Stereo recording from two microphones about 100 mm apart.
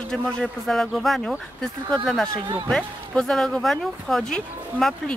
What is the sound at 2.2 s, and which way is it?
Speech, 40° right (ahead or behind).